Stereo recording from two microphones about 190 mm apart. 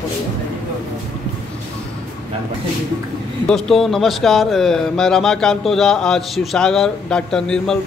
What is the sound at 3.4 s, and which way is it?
A man's voice, centre (ahead or behind).